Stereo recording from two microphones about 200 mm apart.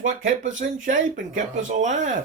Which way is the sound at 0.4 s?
70° right (ahead or behind).